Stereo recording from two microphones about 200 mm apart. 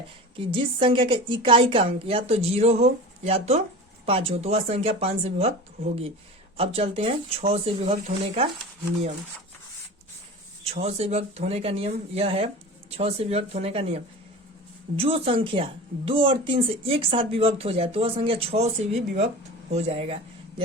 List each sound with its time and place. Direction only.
0.3 s a woman's voice: 25° right (ahead or behind)
10.7 s a woman's voice: 30° right (ahead or behind)